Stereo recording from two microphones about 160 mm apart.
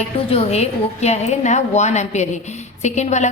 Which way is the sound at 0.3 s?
40° left (ahead or behind).